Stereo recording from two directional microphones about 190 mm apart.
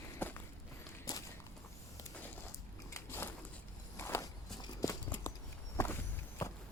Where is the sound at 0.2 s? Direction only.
10° left (ahead or behind).